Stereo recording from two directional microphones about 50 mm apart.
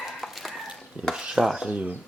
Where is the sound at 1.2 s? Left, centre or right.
Centre.